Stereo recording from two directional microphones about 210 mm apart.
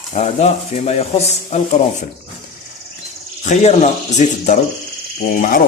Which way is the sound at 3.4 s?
35° left (ahead or behind).